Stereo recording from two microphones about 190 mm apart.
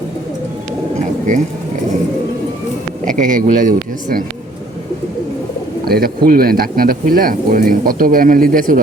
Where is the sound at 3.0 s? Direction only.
40° right (ahead or behind).